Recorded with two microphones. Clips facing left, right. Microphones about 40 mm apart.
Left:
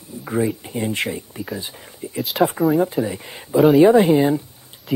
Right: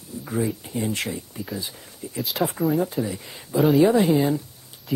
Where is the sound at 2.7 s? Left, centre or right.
Centre.